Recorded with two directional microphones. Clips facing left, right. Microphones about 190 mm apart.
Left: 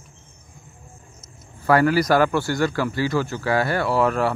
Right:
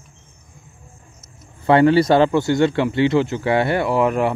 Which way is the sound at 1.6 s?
25° right (ahead or behind).